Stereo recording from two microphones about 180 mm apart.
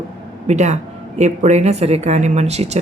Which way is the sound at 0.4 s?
40° right (ahead or behind).